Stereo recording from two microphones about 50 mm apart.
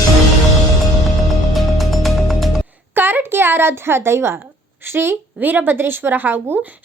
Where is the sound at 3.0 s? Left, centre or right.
Right.